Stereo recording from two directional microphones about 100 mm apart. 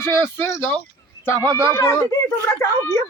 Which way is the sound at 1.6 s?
30° left (ahead or behind).